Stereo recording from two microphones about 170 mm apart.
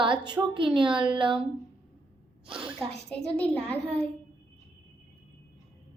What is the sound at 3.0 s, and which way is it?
Speech, 5° left (ahead or behind).